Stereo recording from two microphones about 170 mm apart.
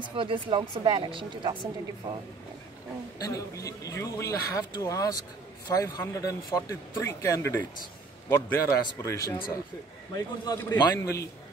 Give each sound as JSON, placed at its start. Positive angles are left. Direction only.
{"t": 0.0, "sound": "a woman's voice", "side_deg": -30}
{"t": 3.2, "sound": "a man's voice", "side_deg": 20}